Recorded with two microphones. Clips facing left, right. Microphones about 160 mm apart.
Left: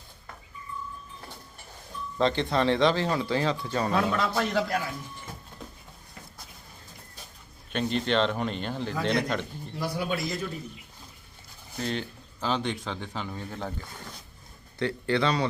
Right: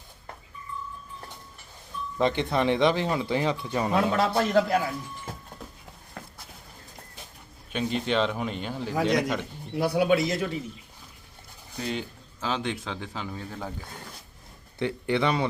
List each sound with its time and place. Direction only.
2.1 s speech: 15° right (ahead or behind)
4.2 s a man's voice: 35° right (ahead or behind)
7.7 s speech: 5° right (ahead or behind)
9.7 s a man's voice: 70° right (ahead or behind); by 10.6 s 90° right
11.8 s speech: 5° right (ahead or behind)
14.8 s speech: 20° right (ahead or behind)